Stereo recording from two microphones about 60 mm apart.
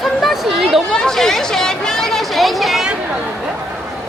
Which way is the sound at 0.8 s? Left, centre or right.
Centre.